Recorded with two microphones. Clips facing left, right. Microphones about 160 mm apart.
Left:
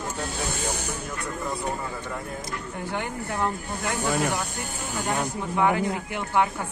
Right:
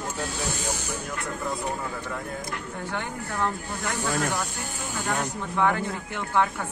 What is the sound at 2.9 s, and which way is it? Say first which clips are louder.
Speech: left 3 dB; 15° left (ahead or behind).